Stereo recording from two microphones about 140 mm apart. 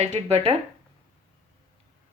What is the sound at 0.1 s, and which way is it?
Speech, 50° right (ahead or behind).